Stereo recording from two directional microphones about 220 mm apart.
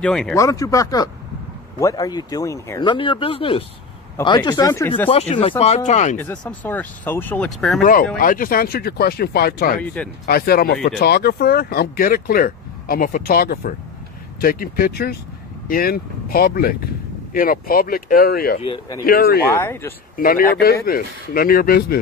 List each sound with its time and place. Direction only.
0.0 s speech: 5° left (ahead or behind)
5.1 s speech: 25° left (ahead or behind)
6.1 s speech: 10° left (ahead or behind)
7.8 s speech: 40° left (ahead or behind)
18.6 s speech: 25° left (ahead or behind)
19.0 s speech: 40° left (ahead or behind)
19.5 s speech: 10° left (ahead or behind)
20.2 s speech: 40° left (ahead or behind)